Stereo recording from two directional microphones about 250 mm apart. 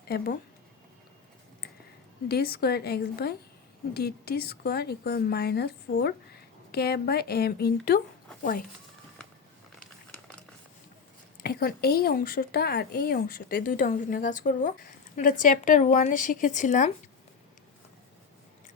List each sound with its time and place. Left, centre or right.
2.2 s speech: left
9.2 s a sound: centre
11.4 s speech: left